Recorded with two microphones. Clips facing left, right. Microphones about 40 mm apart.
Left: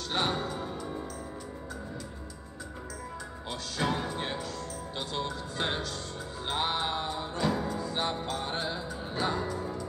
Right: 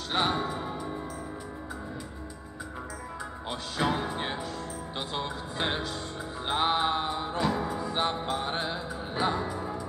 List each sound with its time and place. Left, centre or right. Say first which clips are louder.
0.1 s music: right 3 dB; centre
3.7 s music: right 2 dB; centre